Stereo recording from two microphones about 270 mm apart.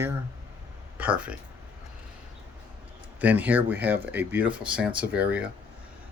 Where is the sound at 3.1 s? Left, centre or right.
Centre.